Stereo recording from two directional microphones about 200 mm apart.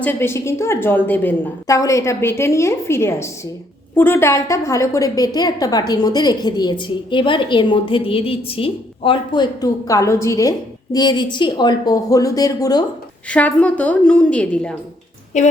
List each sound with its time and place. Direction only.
0.0 s a woman's voice: 10° left (ahead or behind)
13.3 s a woman's voice: 5° left (ahead or behind)
15.3 s a woman's voice: 35° left (ahead or behind)